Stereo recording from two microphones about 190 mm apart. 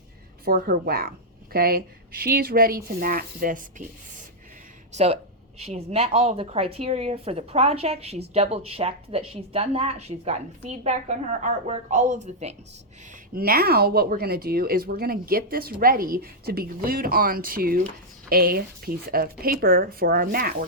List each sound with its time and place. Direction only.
0.4 s speech: 50° right (ahead or behind)
4.9 s a woman's voice: 35° right (ahead or behind)
13.3 s speech: 50° right (ahead or behind)